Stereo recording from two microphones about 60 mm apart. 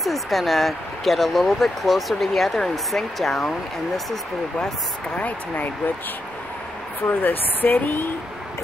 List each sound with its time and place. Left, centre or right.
0.0 s speech: centre
5.1 s speech: left
7.1 s speech: left